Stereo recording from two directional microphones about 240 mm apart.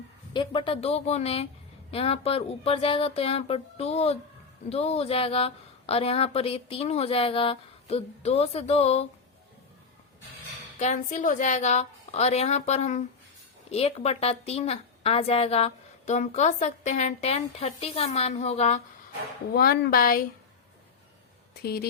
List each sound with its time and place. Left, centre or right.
0.3 s a woman's voice: left
10.8 s a woman's voice: left
19.5 s a woman's voice: left
21.6 s a woman's voice: left